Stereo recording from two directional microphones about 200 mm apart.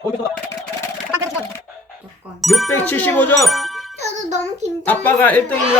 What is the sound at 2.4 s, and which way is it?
Speech, centre (ahead or behind).